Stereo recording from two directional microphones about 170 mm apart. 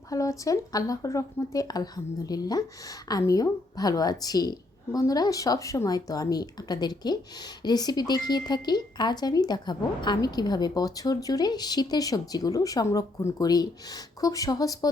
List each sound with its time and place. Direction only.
0.1 s speech: 20° left (ahead or behind)